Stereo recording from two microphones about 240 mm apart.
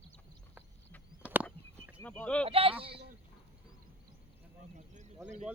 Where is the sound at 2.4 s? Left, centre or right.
Right.